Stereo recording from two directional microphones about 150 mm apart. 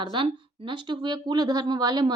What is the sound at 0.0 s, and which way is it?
Speech, 35° right (ahead or behind).